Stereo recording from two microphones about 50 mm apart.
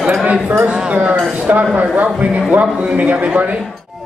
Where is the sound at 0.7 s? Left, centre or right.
Right.